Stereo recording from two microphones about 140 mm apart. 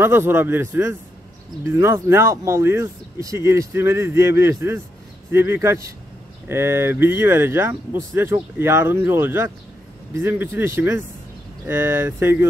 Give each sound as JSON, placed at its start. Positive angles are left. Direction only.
{"t": 0.0, "sound": "speech", "side_deg": -15}